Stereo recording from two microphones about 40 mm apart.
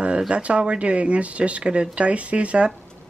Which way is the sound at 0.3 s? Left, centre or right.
Right.